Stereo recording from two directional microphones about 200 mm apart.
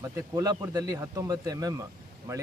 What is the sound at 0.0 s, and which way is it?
Speech, 15° right (ahead or behind).